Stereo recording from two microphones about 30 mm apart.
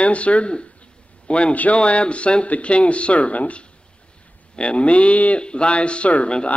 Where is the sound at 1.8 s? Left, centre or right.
Left.